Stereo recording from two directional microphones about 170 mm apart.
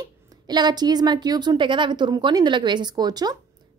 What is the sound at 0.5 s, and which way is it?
Speech, 25° right (ahead or behind).